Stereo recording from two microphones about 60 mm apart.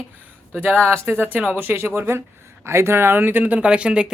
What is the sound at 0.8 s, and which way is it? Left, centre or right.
Speech, right.